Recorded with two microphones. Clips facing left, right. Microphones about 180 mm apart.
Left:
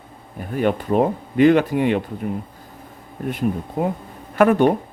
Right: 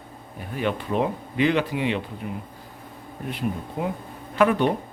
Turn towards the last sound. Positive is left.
turn(degrees=50)  # may be behind; listen again after turning